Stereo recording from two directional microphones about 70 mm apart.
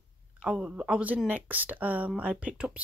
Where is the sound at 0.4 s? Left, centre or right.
Centre.